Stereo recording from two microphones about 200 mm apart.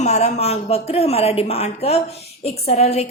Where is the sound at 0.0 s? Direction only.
35° left (ahead or behind).